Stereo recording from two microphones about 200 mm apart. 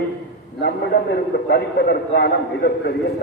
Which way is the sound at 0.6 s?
55° left (ahead or behind).